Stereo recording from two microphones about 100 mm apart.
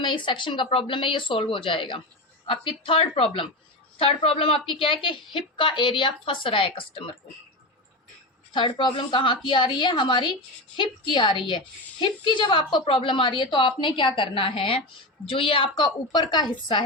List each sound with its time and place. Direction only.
0.0 s a woman's voice: 50° left (ahead or behind)
3.9 s a woman's voice: 75° left (ahead or behind)
8.5 s a woman's voice: 55° left (ahead or behind)